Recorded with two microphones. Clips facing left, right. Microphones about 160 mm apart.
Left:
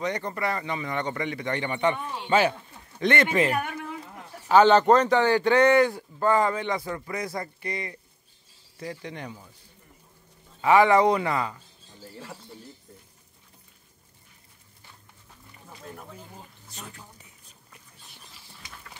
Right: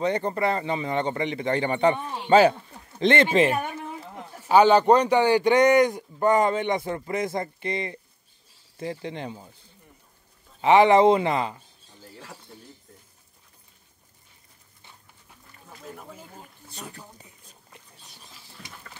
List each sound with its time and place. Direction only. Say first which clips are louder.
0.0 s speech: right 5 dB; 30° right (ahead or behind)
4.5 s speech: right 1 dB; 10° right (ahead or behind)
10.6 s speech: right 2 dB; 25° right (ahead or behind)
15.8 s speech: right 1 dB; 5° right (ahead or behind)